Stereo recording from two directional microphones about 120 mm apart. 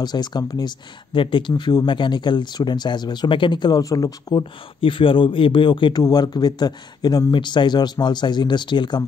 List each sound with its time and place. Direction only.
0.0 s speech: 35° left (ahead or behind)
4.7 s speech: 45° left (ahead or behind)